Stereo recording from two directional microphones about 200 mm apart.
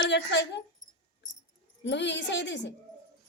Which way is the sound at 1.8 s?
60° left (ahead or behind).